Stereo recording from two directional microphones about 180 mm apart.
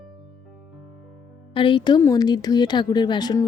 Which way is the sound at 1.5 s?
30° left (ahead or behind).